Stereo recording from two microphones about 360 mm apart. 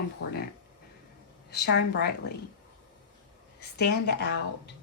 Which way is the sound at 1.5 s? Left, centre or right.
Left.